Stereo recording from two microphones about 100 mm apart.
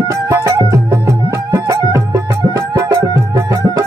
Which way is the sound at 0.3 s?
35° right (ahead or behind).